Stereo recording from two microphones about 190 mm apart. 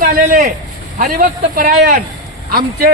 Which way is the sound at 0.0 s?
50° right (ahead or behind).